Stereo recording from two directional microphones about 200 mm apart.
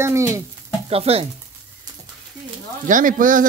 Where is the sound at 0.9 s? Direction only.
30° right (ahead or behind).